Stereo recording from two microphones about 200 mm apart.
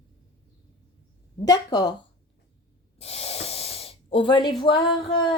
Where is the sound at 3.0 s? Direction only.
30° left (ahead or behind).